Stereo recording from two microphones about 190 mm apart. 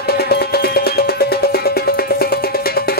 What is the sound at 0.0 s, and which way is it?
Music, 55° left (ahead or behind).